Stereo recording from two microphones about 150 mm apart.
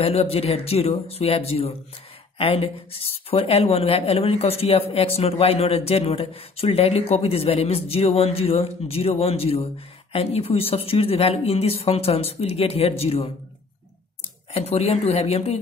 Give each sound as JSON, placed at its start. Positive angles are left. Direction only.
{"t": 0.0, "sound": "speech", "side_deg": 40}
{"t": 14.5, "sound": "speech", "side_deg": 45}